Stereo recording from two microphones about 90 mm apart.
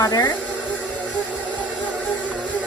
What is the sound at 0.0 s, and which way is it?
Speech, 45° left (ahead or behind).